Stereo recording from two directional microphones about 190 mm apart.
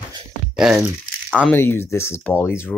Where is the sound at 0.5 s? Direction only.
5° right (ahead or behind).